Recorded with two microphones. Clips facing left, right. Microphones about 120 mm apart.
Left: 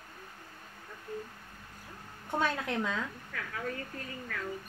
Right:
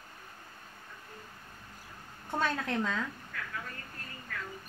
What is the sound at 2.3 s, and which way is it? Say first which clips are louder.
Speech: even; 10° left (ahead or behind).